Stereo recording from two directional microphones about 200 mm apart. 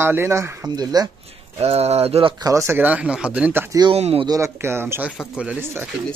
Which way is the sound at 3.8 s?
30° right (ahead or behind).